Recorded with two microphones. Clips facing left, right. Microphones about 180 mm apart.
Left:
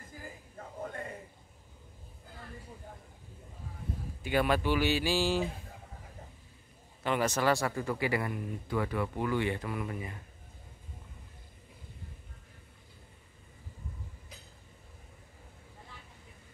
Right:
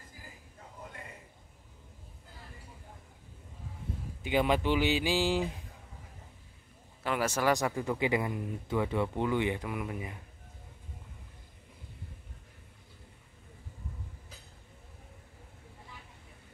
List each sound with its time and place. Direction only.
0.6 s a sound: 50° left (ahead or behind)
4.2 s speech: 20° right (ahead or behind)
7.0 s speech: 5° right (ahead or behind)